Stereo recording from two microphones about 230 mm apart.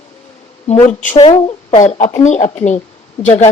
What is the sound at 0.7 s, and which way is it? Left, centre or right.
Speech, left.